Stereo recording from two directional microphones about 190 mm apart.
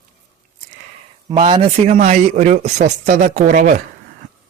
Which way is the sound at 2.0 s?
40° right (ahead or behind).